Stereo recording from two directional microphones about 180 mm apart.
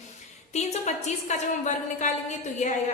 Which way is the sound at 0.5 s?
40° left (ahead or behind).